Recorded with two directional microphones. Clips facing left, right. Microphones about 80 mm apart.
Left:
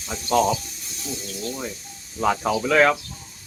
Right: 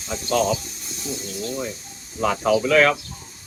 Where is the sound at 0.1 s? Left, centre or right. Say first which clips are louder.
Left 1 dB; centre.